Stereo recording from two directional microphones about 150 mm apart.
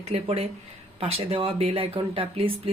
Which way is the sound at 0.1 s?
45° right (ahead or behind).